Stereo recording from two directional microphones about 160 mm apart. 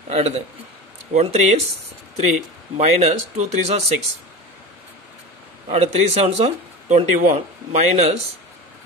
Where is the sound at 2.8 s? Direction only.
45° right (ahead or behind).